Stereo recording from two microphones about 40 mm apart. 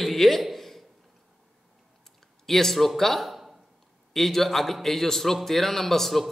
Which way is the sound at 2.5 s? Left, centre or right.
Centre.